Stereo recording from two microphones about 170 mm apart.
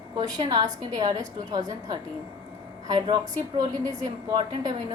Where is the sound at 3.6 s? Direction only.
25° right (ahead or behind).